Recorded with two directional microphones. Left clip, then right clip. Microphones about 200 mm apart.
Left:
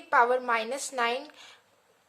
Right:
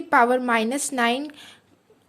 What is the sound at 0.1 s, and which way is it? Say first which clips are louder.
A woman's voice: right 5 dB; 30° right (ahead or behind).